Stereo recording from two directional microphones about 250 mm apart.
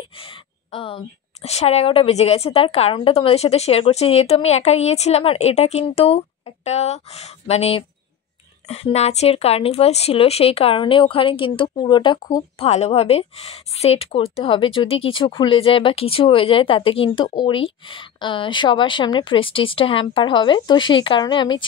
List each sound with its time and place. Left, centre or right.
0.2 s speech: left